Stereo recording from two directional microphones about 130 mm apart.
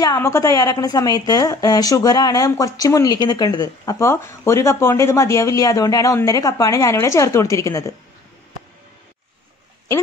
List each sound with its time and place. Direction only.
0.0 s a woman's voice: 25° left (ahead or behind)